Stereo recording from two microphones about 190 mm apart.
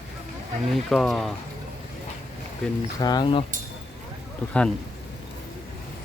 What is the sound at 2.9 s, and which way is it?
Speech, 20° left (ahead or behind).